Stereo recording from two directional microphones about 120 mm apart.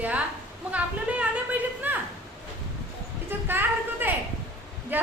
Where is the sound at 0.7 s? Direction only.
10° right (ahead or behind).